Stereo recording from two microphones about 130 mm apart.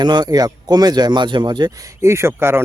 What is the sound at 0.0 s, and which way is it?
Speech, 35° right (ahead or behind).